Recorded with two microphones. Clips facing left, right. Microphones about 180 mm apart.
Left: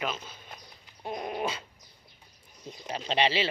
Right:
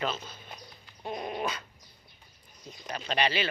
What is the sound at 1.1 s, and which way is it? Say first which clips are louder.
Speech: left 1 dB; 10° left (ahead or behind).